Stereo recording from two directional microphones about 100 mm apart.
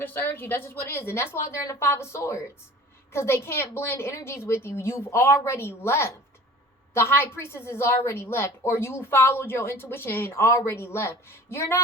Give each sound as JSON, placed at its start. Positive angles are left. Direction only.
{"t": 0.0, "sound": "a woman's voice", "side_deg": 20}